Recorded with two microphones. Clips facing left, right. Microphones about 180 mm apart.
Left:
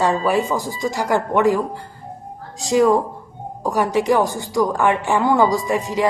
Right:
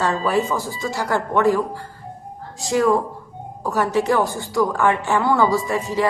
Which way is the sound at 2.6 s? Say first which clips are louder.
Left 3 dB; 15° left (ahead or behind).